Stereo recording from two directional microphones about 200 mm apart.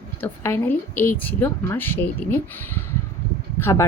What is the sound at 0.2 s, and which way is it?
Speech, 10° left (ahead or behind).